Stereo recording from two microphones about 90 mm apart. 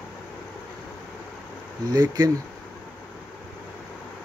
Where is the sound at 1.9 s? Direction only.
45° right (ahead or behind).